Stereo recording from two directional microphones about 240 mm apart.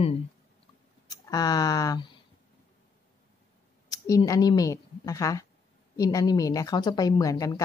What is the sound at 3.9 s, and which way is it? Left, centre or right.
Speech, centre.